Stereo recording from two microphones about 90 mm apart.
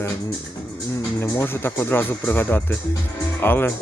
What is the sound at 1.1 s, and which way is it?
Speech, 25° left (ahead or behind).